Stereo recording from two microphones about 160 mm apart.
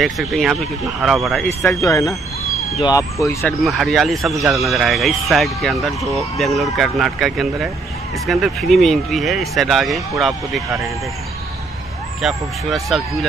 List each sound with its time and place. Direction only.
0.0 s speech: centre (ahead or behind)
1.6 s speech: 20° left (ahead or behind)
3.4 s speech: centre (ahead or behind)
12.2 s speech: centre (ahead or behind)